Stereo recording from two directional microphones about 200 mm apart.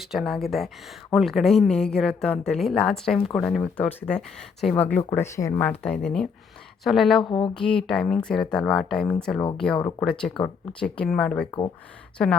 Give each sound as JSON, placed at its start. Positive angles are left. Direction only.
{"t": 0.0, "sound": "a woman's voice", "side_deg": 0}
{"t": 7.2, "sound": "speech", "side_deg": 25}
{"t": 7.5, "sound": "a woman's voice", "side_deg": 5}